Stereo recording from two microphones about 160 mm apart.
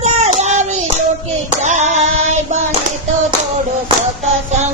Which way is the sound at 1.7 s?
45° right (ahead or behind).